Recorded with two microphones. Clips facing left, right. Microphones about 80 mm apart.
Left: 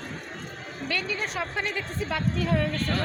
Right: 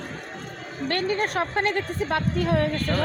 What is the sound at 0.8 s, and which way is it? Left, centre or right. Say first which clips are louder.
A woman's voice: right 6 dB; right.